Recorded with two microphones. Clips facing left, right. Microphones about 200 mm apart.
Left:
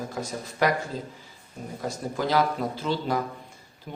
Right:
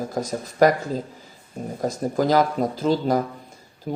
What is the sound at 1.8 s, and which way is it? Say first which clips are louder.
Speech: right 7 dB; 40° right (ahead or behind).